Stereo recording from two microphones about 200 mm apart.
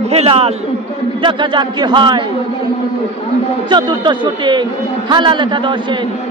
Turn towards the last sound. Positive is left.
turn(degrees=-25)  # may be behind; listen again after turning